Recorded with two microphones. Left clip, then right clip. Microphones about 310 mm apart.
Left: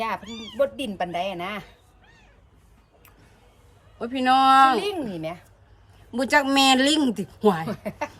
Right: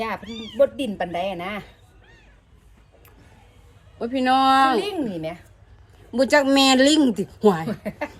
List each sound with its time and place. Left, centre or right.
0.0 s speech: centre
3.9 s speech: centre
7.7 s speech: centre